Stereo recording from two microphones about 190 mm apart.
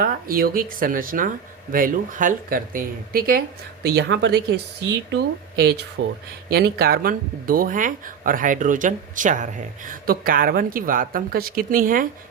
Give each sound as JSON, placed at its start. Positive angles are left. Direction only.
{"t": 0.0, "sound": "speech", "side_deg": -50}
{"t": 3.8, "sound": "speech", "side_deg": -60}